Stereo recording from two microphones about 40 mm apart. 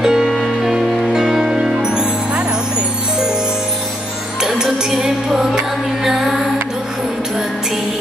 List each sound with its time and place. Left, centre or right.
0.0 s music: centre
0.3 s music: centre
0.7 s music: centre
4.4 s music: centre